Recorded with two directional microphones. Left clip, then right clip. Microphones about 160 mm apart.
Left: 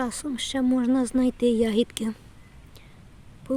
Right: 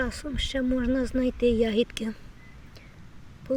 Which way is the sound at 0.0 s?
35° left (ahead or behind).